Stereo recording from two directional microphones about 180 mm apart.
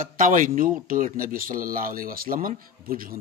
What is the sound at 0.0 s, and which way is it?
Speech, 50° right (ahead or behind).